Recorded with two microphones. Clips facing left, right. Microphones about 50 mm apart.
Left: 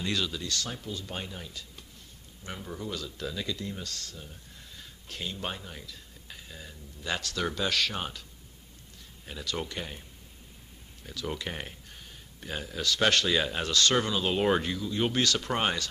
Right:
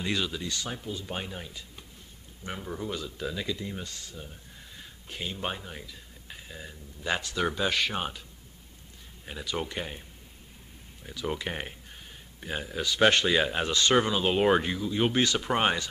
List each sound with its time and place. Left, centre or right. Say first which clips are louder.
0.0 s speech: right 1 dB; centre
9.2 s speech: right 2 dB; centre
11.1 s speech: right 3 dB; centre